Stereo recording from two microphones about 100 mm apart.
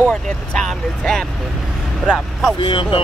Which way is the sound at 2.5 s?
55° left (ahead or behind).